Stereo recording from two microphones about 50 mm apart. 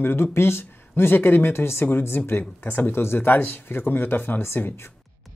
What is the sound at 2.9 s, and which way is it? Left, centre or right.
Speech, left.